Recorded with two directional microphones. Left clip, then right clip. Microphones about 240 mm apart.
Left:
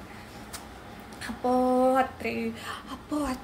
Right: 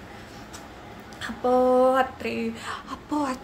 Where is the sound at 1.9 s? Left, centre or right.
Centre.